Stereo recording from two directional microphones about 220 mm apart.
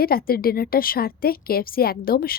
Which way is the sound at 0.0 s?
45° left (ahead or behind).